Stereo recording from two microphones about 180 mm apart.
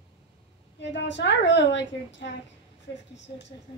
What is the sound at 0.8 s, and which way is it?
A woman's voice, 80° left.